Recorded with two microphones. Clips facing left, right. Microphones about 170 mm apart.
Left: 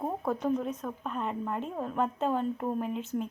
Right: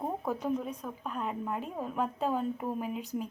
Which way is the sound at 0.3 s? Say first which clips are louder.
Left 4 dB; 5° right (ahead or behind).